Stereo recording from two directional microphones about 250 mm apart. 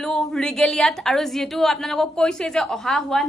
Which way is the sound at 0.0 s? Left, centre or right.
Centre.